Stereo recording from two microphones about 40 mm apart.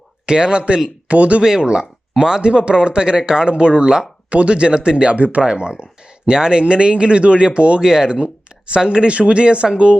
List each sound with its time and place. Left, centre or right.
0.3 s speech: right
1.0 s speech: right
1.4 s speech: centre
5.1 s speech: right
5.5 s speech: right
7.8 s speech: centre